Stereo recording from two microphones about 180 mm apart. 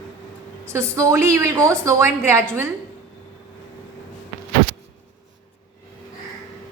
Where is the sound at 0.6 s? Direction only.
15° right (ahead or behind).